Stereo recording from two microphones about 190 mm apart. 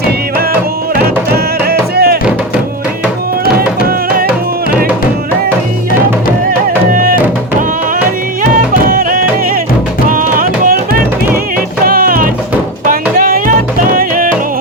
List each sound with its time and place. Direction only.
1.6 s music: 55° right (ahead or behind)
6.9 s music: 50° right (ahead or behind)
8.9 s music: 50° right (ahead or behind)